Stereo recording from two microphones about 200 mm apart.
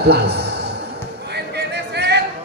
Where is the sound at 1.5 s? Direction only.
55° right (ahead or behind).